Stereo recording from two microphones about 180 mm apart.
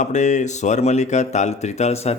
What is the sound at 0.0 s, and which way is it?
Speech, 40° left (ahead or behind).